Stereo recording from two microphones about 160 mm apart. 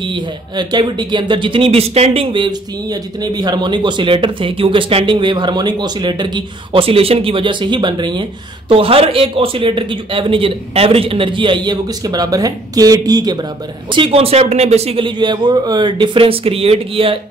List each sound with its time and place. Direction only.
0.0 s speech: 30° right (ahead or behind)
13.9 s speech: 35° right (ahead or behind)